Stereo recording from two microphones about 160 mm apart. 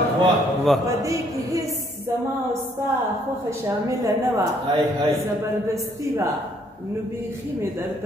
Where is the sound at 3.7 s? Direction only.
20° right (ahead or behind).